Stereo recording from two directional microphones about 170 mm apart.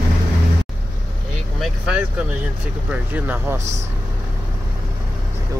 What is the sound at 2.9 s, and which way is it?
Speech, 10° right (ahead or behind).